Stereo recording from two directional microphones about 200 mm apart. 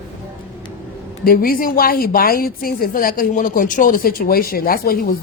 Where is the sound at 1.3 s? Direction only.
45° left (ahead or behind).